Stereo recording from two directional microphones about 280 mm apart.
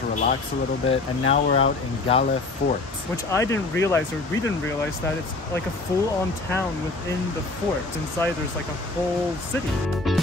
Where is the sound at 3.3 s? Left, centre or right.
Centre.